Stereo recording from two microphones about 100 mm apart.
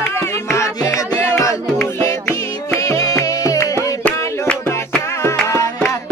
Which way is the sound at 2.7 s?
30° left (ahead or behind).